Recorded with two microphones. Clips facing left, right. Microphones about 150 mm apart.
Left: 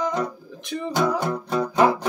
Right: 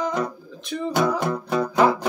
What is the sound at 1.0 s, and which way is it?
Music, 15° right (ahead or behind).